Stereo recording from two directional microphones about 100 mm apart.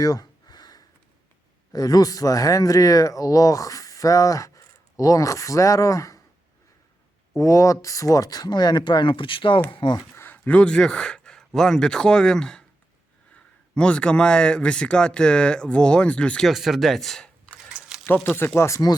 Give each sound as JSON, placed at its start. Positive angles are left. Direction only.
{"t": 0.0, "sound": "a sound", "side_deg": 40}
{"t": 1.7, "sound": "speech", "side_deg": 35}
{"t": 7.3, "sound": "speech", "side_deg": 30}
{"t": 10.2, "sound": "speech", "side_deg": 20}
{"t": 13.7, "sound": "speech", "side_deg": 10}
{"t": 16.5, "sound": "speech", "side_deg": 0}
{"t": 17.7, "sound": "a sound", "side_deg": -5}
{"t": 18.3, "sound": "speech", "side_deg": 25}